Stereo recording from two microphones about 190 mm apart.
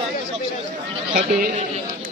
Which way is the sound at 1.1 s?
45° right (ahead or behind).